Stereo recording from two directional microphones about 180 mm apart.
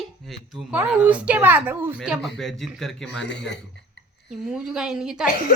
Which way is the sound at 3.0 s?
75° left (ahead or behind).